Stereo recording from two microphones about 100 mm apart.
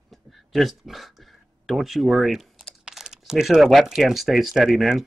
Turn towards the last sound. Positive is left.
turn(degrees=0)  # may be behind; listen again after turning